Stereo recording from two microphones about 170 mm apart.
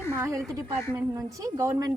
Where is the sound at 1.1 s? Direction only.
15° right (ahead or behind).